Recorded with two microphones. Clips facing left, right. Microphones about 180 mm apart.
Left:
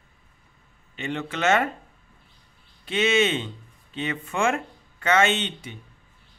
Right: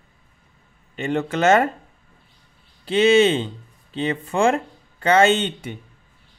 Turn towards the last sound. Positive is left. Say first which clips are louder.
# right 7 dB
turn(degrees=-55)  # may be behind; listen again after turning